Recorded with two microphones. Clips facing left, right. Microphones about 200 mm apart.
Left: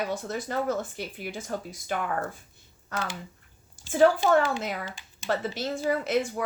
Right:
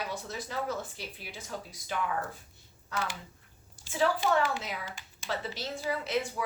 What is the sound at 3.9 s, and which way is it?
A woman's voice, 50° left (ahead or behind).